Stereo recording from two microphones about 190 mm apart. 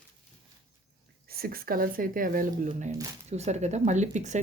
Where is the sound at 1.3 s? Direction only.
50° right (ahead or behind).